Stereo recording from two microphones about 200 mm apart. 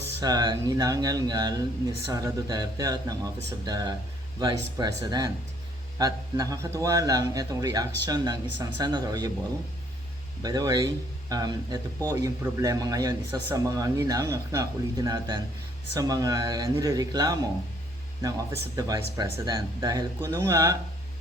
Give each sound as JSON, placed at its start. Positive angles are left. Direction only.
{"t": 0.2, "sound": "speech", "side_deg": -20}
{"t": 10.4, "sound": "speech", "side_deg": -20}
{"t": 18.8, "sound": "speech", "side_deg": -15}